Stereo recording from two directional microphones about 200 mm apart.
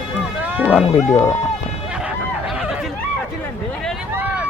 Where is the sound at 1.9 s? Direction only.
5° right (ahead or behind).